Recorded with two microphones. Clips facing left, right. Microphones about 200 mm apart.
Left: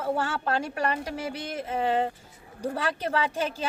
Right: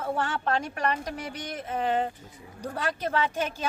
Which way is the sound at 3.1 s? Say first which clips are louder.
Even; 30° left (ahead or behind).